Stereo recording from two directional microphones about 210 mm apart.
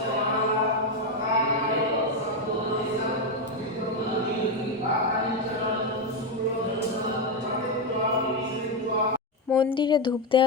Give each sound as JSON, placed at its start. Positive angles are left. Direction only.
{"t": 9.6, "sound": "speech", "side_deg": 20}